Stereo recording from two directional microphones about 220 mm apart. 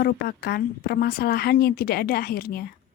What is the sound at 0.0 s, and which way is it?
A woman's voice, 45° left (ahead or behind).